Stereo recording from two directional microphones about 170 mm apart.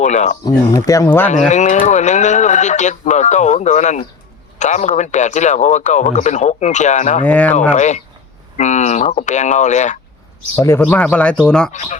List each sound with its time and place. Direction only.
0.0 s speech: 45° left (ahead or behind)
0.4 s speech: 20° left (ahead or behind)
1.3 s speech: 45° left (ahead or behind)
7.3 s speech: 10° left (ahead or behind)
7.7 s speech: 45° left (ahead or behind)
10.5 s speech: 15° left (ahead or behind)
11.7 s speech: 45° left (ahead or behind)